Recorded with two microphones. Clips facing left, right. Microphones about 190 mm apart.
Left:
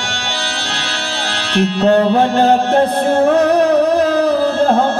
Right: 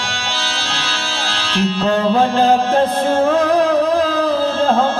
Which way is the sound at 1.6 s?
60° left (ahead or behind).